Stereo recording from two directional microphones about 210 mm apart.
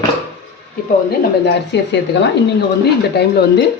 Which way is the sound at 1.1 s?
55° left (ahead or behind).